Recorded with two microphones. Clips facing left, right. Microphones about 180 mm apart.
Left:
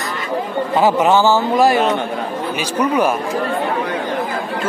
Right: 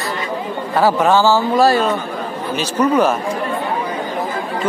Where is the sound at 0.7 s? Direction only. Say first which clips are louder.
Even; 20° left (ahead or behind).